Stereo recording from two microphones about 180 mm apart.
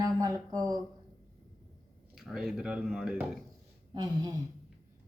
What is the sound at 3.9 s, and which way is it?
Speech, 20° right (ahead or behind).